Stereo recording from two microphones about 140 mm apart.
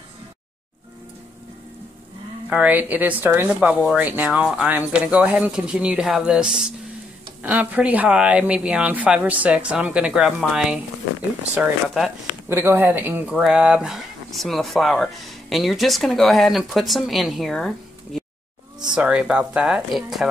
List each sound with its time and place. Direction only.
2.5 s speech: 10° right (ahead or behind)
12.4 s speech: 20° right (ahead or behind); by 20.2 s centre (ahead or behind)